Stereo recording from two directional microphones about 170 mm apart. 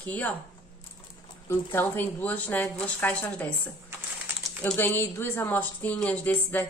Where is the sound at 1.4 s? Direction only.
10° left (ahead or behind).